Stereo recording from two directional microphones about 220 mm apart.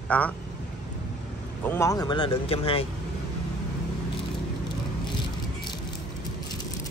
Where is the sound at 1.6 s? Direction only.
10° left (ahead or behind).